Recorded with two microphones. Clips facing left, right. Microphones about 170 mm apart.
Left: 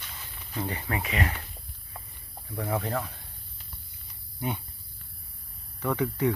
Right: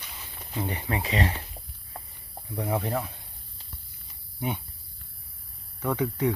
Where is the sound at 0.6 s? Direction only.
20° right (ahead or behind).